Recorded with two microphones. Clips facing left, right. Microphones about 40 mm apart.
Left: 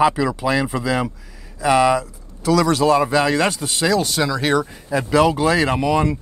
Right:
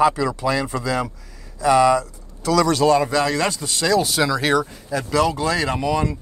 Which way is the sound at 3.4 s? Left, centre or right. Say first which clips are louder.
Left 2 dB; left.